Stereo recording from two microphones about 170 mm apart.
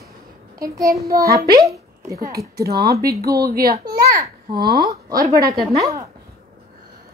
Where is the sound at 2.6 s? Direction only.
65° right (ahead or behind).